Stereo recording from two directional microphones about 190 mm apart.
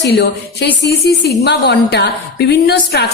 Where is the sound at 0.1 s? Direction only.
60° left (ahead or behind).